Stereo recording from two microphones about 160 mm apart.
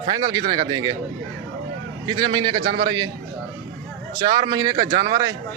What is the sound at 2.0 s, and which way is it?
Speech, 25° right (ahead or behind).